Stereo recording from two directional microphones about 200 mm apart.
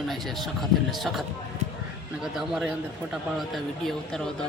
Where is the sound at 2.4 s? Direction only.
5° right (ahead or behind).